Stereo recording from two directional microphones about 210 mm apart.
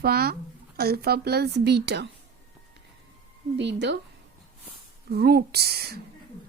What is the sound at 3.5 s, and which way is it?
Speech, 55° right (ahead or behind).